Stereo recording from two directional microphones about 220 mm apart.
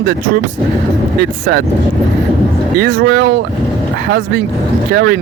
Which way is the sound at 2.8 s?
45° right (ahead or behind).